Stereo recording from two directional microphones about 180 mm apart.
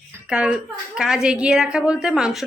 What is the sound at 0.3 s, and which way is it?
A woman's voice, 5° right (ahead or behind).